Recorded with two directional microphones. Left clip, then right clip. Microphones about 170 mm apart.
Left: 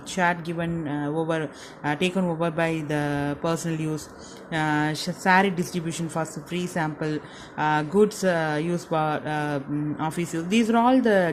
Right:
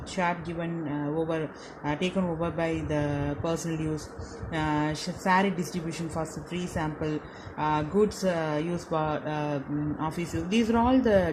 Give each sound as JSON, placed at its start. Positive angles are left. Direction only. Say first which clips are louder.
{"t": 0.1, "sound": "speech", "louder": "left 5 dB", "side_deg": 50}